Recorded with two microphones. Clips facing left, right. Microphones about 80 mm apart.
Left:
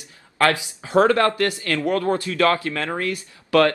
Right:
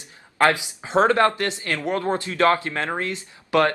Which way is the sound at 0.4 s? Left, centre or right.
Right.